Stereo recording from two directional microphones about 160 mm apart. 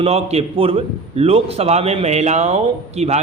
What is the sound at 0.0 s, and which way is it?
A man's voice, 40° right (ahead or behind).